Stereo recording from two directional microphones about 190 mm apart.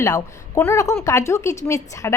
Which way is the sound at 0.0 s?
15° left (ahead or behind).